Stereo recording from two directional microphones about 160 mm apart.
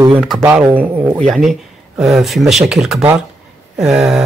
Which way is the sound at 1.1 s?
Centre (ahead or behind).